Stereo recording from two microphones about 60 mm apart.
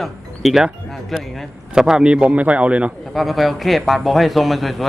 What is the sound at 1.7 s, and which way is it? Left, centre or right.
Speech, centre.